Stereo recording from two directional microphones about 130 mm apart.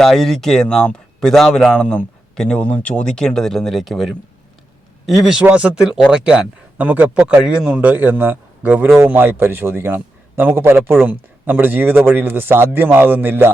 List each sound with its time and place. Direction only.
0.0 s a man's voice: 5° left (ahead or behind); by 13.5 s 15° right (ahead or behind)